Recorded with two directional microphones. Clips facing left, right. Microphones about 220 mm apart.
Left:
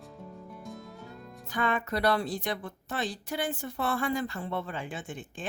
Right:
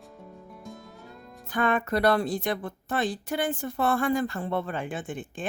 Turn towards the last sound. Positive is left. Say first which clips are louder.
# right 5 dB
turn(degrees=-55)  # may be behind; listen again after turning